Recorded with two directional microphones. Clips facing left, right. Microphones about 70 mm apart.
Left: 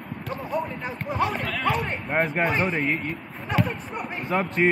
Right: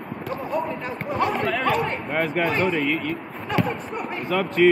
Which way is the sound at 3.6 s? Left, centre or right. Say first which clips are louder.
Right 2 dB; centre.